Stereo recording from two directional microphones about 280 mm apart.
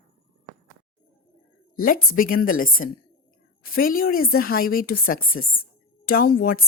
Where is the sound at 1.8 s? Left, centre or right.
Left.